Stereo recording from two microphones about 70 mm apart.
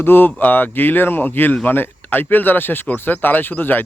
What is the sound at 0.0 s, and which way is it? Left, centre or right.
Speech, left.